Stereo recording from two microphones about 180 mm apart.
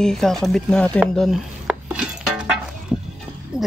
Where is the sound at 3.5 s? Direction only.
5° right (ahead or behind).